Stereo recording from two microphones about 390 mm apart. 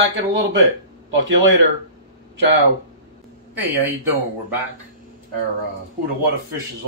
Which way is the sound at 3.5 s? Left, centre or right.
Centre.